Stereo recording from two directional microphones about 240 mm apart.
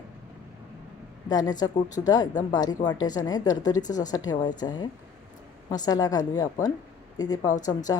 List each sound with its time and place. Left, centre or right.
1.3 s speech: centre